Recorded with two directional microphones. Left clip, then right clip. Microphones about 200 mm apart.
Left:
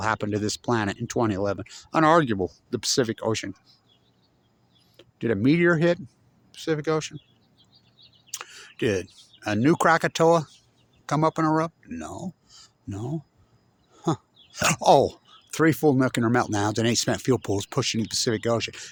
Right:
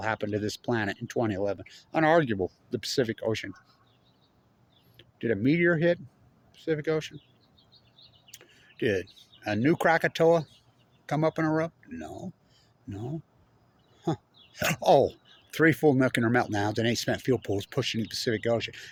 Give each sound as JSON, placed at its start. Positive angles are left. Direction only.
{"t": 0.0, "sound": "speech", "side_deg": 45}
{"t": 5.2, "sound": "speech", "side_deg": 45}
{"t": 8.8, "sound": "speech", "side_deg": 45}
{"t": 11.9, "sound": "speech", "side_deg": 55}
{"t": 15.8, "sound": "speech", "side_deg": 30}
{"t": 16.3, "sound": "speech", "side_deg": 45}